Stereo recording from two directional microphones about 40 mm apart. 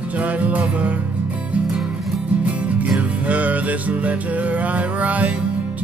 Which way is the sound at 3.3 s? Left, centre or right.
Right.